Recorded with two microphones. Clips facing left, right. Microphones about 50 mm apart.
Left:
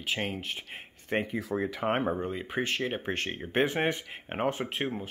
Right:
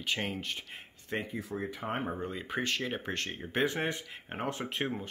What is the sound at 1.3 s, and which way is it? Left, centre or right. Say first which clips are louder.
Speech: left 6 dB; left.